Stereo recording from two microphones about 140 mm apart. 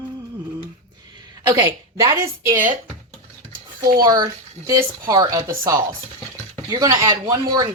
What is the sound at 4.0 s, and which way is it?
Speech, 25° right (ahead or behind).